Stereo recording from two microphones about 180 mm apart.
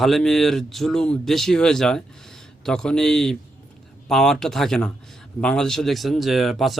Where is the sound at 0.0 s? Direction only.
Centre (ahead or behind).